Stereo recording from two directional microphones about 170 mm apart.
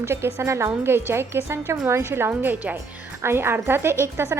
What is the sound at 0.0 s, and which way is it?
Speech, 15° right (ahead or behind).